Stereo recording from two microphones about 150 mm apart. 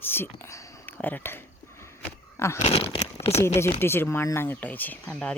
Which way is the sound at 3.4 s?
15° left (ahead or behind).